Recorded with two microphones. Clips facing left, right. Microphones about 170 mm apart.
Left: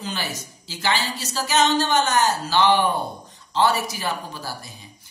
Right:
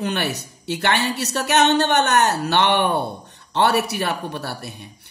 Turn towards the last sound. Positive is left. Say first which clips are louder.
# right 5 dB
turn(degrees=-70)  # may be behind; listen again after turning